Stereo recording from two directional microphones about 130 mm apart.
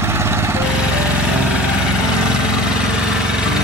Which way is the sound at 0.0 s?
20° right (ahead or behind).